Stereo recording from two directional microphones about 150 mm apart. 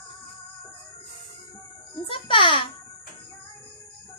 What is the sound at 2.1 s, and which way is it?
Speech, 35° left (ahead or behind).